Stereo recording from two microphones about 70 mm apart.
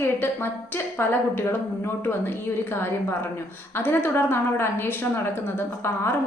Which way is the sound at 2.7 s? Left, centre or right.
Left.